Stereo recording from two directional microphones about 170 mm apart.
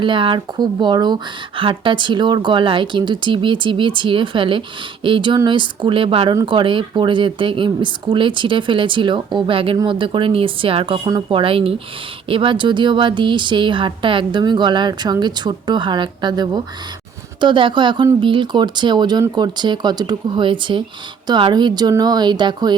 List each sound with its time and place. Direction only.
0.0 s speech: 30° right (ahead or behind)